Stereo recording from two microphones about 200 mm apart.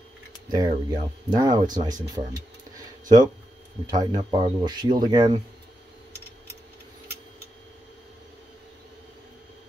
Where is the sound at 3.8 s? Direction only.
20° right (ahead or behind).